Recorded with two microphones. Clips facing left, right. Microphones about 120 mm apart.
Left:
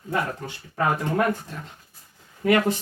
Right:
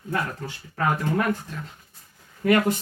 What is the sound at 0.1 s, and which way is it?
Speech, 20° left (ahead or behind).